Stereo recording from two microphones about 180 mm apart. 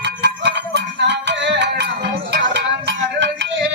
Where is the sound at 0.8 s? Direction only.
75° right (ahead or behind).